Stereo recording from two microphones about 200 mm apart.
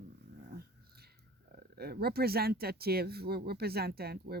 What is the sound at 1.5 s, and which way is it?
Speech, 50° right (ahead or behind).